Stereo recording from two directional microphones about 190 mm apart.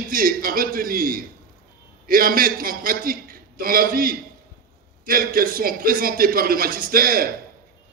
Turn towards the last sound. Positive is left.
turn(degrees=-50)  # may be behind; listen again after turning